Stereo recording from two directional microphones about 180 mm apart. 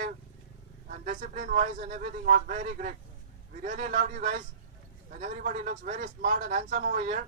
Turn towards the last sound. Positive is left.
turn(degrees=-50)  # may be behind; listen again after turning